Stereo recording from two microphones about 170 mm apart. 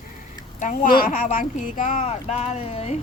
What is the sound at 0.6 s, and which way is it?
Speech, 50° left (ahead or behind).